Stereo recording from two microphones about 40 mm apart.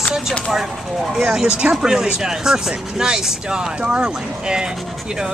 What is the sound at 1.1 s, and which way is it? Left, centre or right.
Speech, centre.